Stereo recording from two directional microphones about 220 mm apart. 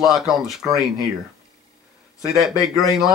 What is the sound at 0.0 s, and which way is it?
Speech, centre (ahead or behind).